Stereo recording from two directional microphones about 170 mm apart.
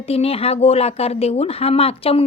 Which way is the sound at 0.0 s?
35° left (ahead or behind).